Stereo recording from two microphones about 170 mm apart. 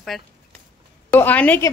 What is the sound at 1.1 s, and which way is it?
Speech, 10° left (ahead or behind).